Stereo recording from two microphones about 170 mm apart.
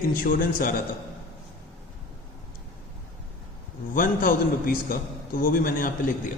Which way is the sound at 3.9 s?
55° left (ahead or behind).